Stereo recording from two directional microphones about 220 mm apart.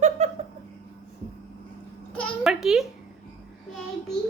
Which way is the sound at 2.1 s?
Centre (ahead or behind).